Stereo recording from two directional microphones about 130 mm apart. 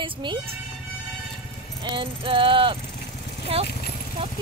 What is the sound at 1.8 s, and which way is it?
Speech, 40° right (ahead or behind).